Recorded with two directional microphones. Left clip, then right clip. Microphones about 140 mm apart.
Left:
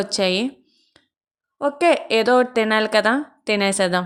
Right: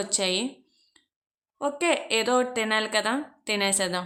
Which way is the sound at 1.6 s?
40° left (ahead or behind).